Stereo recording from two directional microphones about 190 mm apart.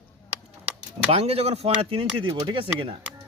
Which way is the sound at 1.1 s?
30° right (ahead or behind).